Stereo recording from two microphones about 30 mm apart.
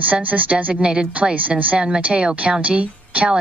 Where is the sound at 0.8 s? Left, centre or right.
Right.